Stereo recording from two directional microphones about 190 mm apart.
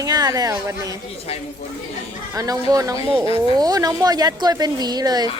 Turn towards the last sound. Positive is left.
turn(degrees=-20)  # may be behind; listen again after turning